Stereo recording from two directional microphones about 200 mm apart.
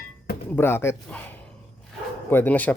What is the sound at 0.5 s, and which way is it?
Speech, 10° left (ahead or behind).